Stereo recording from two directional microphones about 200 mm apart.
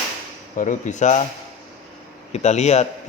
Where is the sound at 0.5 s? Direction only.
40° left (ahead or behind).